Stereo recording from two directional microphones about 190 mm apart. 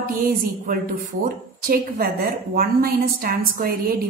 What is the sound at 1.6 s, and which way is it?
A woman's voice, 50° right (ahead or behind).